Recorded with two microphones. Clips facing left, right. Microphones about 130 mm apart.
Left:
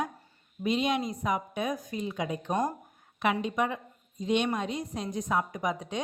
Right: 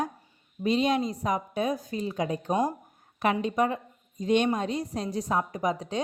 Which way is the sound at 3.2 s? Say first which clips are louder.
Right 3 dB; 40° right (ahead or behind).